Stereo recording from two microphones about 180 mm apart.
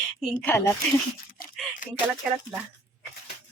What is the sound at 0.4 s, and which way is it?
Speech, 15° left (ahead or behind).